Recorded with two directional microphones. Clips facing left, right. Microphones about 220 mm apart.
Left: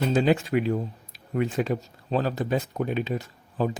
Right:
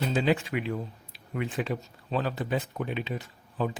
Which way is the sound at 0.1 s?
45° left (ahead or behind).